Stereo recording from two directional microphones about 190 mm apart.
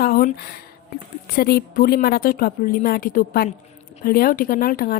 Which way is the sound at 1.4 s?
55° left (ahead or behind).